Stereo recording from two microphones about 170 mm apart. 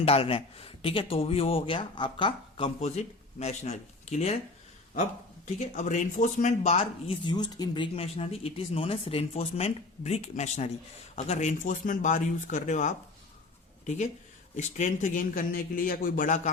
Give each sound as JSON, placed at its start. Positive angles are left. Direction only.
{"t": 0.0, "sound": "speech", "side_deg": 35}
{"t": 5.5, "sound": "a man's voice", "side_deg": 45}
{"t": 14.5, "sound": "a man's voice", "side_deg": 45}